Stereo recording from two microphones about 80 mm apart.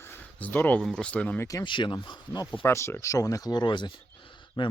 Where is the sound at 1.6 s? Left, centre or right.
Left.